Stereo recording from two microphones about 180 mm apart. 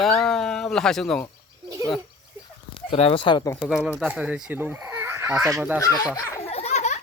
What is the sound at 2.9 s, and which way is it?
Speech, 30° left (ahead or behind).